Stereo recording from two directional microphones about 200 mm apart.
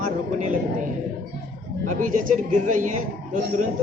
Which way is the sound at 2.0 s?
40° right (ahead or behind).